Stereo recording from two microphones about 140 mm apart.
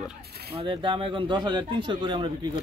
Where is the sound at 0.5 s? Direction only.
35° right (ahead or behind).